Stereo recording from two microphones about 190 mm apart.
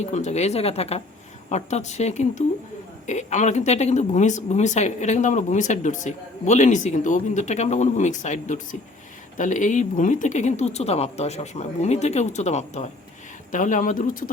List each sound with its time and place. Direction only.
0.0 s speech: 35° left (ahead or behind)